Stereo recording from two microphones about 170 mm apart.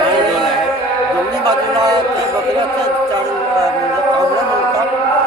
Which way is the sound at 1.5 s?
25° right (ahead or behind).